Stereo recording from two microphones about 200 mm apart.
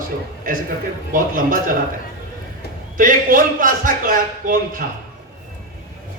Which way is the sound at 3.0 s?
45° right (ahead or behind).